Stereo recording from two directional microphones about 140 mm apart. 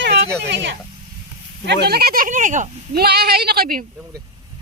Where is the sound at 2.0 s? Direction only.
90° right.